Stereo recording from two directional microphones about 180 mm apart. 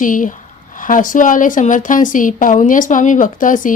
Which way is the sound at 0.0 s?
45° left (ahead or behind).